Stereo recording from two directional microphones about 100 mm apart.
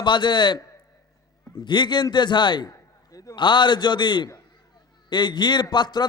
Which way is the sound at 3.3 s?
50° left (ahead or behind).